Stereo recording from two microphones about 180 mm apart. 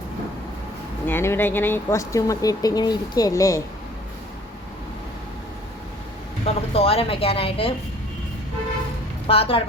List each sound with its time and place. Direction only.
1.0 s speech: 15° left (ahead or behind)
6.4 s speech: 35° left (ahead or behind)
9.2 s speech: 30° left (ahead or behind)